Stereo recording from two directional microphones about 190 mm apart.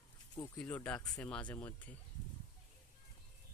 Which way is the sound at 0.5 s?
5° left (ahead or behind).